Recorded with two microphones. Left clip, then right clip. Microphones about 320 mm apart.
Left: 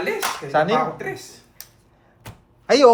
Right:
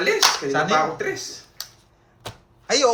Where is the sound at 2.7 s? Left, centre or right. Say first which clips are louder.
Left 4 dB; left.